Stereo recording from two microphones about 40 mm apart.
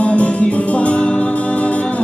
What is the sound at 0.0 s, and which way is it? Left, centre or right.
Music, left.